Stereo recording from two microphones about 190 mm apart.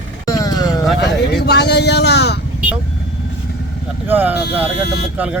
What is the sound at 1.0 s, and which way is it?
Speech, 60° left (ahead or behind).